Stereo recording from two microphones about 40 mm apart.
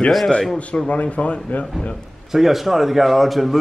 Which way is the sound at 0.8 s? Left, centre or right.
Left.